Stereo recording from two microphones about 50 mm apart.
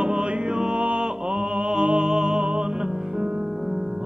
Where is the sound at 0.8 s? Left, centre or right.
Centre.